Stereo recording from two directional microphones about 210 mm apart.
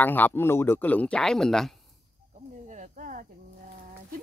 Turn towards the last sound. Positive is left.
turn(degrees=-40)  # may be behind; listen again after turning